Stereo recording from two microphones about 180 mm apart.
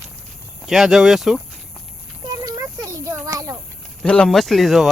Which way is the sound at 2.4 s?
20° right (ahead or behind).